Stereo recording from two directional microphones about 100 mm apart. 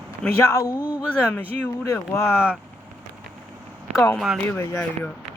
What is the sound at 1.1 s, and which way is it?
Speech, 20° left (ahead or behind).